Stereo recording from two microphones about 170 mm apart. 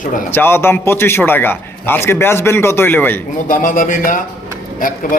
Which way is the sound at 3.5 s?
55° left (ahead or behind).